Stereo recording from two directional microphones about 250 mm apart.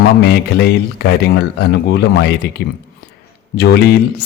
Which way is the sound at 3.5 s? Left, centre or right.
Left.